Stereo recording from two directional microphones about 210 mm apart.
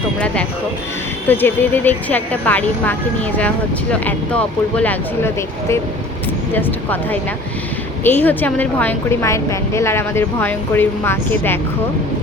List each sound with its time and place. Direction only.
1.3 s a woman's voice: 10° left (ahead or behind)
4.0 s a woman's voice: 5° left (ahead or behind)